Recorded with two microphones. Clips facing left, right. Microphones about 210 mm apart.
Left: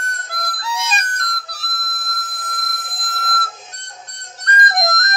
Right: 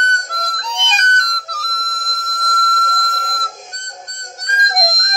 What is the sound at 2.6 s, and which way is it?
Telephone bell ringing, 10° left (ahead or behind).